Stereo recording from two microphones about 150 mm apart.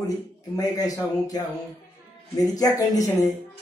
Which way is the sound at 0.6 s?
25° left (ahead or behind).